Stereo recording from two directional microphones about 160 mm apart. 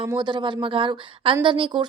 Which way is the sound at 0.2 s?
30° right (ahead or behind).